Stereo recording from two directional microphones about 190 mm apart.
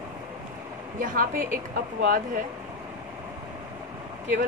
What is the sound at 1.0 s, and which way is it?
A woman's voice, 45° right (ahead or behind).